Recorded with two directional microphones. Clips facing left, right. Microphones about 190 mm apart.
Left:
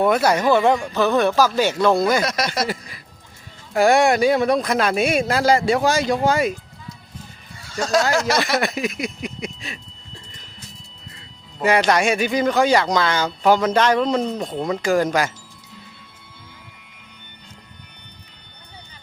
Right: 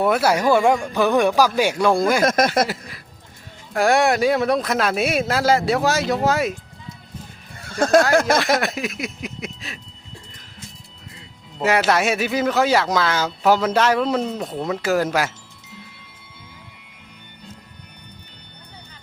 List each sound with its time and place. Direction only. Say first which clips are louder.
0.0 s speech: left 1 dB; 5° right (ahead or behind)
2.2 s speech: right 6 dB; 50° right (ahead or behind)
2.6 s speech: left 2 dB; centre (ahead or behind)
7.6 s music: right 4 dB; 55° right (ahead or behind)
8.1 s speech: right 3 dB; 55° right (ahead or behind)
8.5 s speech: left 1 dB; centre (ahead or behind)
11.6 s speech: left 1 dB; centre (ahead or behind)